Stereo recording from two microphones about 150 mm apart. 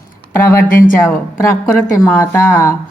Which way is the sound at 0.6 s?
65° left (ahead or behind).